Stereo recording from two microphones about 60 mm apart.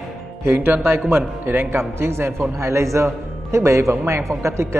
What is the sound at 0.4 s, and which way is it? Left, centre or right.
A man's voice, right.